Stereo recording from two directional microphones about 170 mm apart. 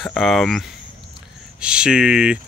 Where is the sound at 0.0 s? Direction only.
Centre (ahead or behind).